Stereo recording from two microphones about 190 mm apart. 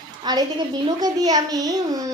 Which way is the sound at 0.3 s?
20° right (ahead or behind).